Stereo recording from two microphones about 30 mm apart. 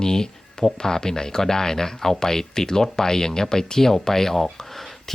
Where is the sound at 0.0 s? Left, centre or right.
Centre.